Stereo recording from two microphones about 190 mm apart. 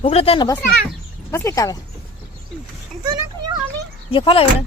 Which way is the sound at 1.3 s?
15° left (ahead or behind).